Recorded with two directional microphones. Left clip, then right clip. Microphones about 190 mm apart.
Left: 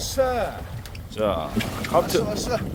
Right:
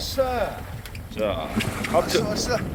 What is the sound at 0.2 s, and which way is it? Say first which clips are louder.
Speech: left 1 dB; 65° left (ahead or behind).